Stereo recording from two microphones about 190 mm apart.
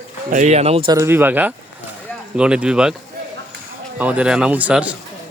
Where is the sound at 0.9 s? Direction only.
15° right (ahead or behind).